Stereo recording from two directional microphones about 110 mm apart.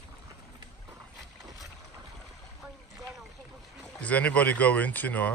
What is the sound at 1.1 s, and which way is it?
Boat, centre (ahead or behind).